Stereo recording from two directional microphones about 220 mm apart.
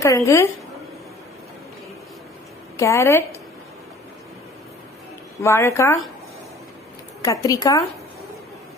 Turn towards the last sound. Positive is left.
turn(degrees=15)  # may be behind; listen again after turning